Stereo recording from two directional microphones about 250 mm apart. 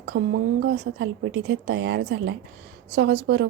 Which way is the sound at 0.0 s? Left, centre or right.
Right.